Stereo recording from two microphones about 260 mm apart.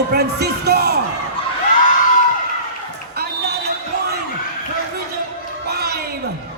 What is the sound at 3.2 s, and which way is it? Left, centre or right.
Basketball bounce, right.